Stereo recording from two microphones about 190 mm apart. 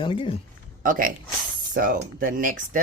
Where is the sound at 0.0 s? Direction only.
25° left (ahead or behind).